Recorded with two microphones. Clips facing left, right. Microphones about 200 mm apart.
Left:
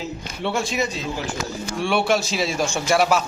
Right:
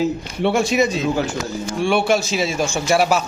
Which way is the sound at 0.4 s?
70° right (ahead or behind).